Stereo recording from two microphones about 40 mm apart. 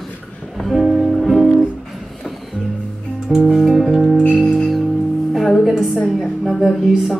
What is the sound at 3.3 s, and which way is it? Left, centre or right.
Music, centre.